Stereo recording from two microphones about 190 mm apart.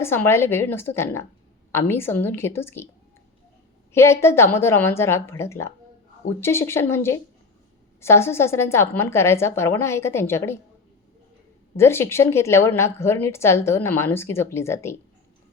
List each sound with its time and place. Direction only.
0.0 s a woman's voice: 15° left (ahead or behind)
3.9 s a woman's voice: 15° left (ahead or behind)
11.8 s a woman's voice: 15° left (ahead or behind)